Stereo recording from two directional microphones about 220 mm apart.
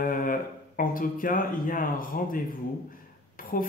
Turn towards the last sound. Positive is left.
turn(degrees=40)  # may be behind; listen again after turning